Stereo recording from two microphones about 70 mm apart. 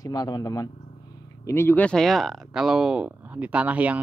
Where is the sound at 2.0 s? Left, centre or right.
Centre.